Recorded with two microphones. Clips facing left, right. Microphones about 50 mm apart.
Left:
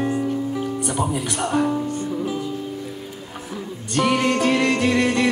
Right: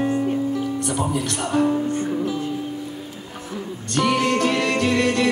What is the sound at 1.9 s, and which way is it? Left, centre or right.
Music, right.